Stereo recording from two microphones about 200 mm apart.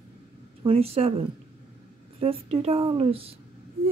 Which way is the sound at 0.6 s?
30° right (ahead or behind).